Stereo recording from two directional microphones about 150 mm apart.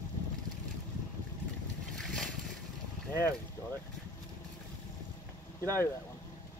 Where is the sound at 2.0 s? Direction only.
5° left (ahead or behind).